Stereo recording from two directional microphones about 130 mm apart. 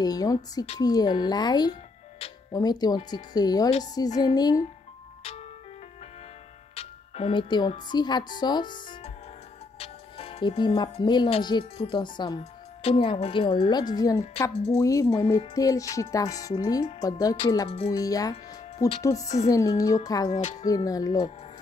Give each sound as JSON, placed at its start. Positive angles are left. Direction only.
{"t": 0.0, "sound": "speech", "side_deg": 30}
{"t": 6.7, "sound": "music", "side_deg": 50}
{"t": 7.9, "sound": "speech", "side_deg": 35}
{"t": 9.8, "sound": "music", "side_deg": 50}
{"t": 11.0, "sound": "speech", "side_deg": 35}
{"t": 12.4, "sound": "speech", "side_deg": 45}
{"t": 14.5, "sound": "speech", "side_deg": 50}
{"t": 14.8, "sound": "speech", "side_deg": 25}
{"t": 17.6, "sound": "speech", "side_deg": 50}
{"t": 17.9, "sound": "speech", "side_deg": 30}